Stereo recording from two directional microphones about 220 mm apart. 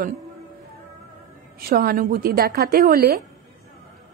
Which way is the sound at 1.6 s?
45° right (ahead or behind).